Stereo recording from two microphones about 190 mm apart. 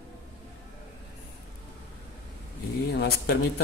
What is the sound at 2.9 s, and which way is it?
Speech, 65° left (ahead or behind).